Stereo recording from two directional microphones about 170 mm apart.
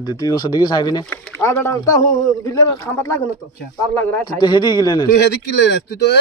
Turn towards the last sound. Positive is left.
turn(degrees=80)